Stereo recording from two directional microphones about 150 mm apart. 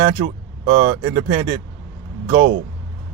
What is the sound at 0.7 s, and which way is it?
A man's voice, 25° right (ahead or behind).